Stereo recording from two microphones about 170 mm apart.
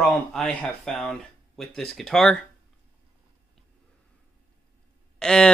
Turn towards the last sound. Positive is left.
turn(degrees=5)  # may be behind; listen again after turning